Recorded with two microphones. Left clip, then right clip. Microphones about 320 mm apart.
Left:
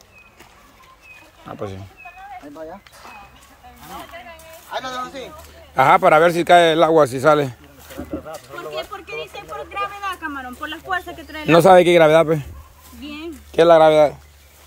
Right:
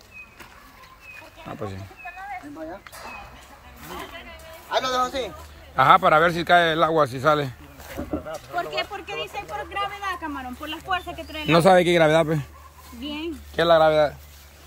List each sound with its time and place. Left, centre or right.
1.5 s speech: centre
4.6 s speech: right
5.8 s a man's voice: centre
10.0 s speech: centre
13.6 s a man's voice: centre